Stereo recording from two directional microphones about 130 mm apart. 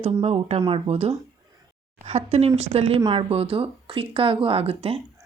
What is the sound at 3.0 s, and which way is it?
Speech, 35° right (ahead or behind).